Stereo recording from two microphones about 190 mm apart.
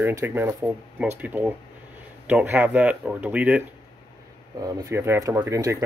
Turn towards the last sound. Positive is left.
turn(degrees=-15)  # may be behind; listen again after turning